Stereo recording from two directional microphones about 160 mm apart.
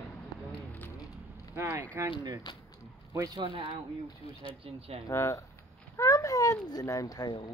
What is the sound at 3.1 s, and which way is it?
Speech, 20° right (ahead or behind).